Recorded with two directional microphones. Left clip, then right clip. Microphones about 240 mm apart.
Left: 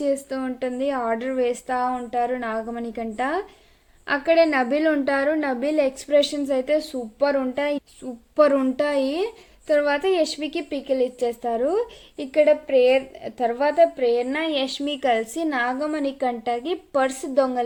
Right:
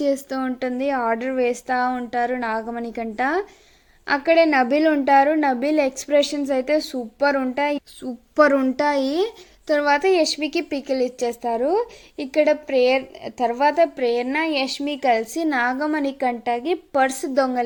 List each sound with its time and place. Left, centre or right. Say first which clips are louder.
0.0 s a woman's voice: right 2 dB; right